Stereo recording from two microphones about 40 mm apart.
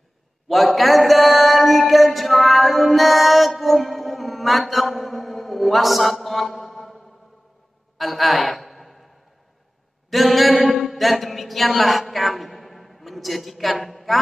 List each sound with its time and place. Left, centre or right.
0.5 s mantra: centre
8.0 s a sound: centre
10.0 s speech: centre